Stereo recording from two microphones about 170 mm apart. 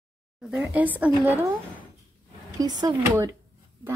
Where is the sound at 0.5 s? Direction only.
5° right (ahead or behind).